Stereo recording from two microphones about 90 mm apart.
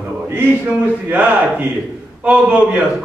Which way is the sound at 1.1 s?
15° right (ahead or behind).